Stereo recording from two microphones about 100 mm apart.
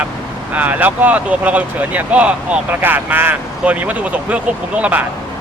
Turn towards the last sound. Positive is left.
turn(degrees=-15)  # may be behind; listen again after turning